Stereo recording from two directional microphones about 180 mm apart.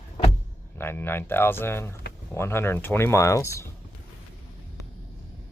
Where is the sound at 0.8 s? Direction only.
15° left (ahead or behind).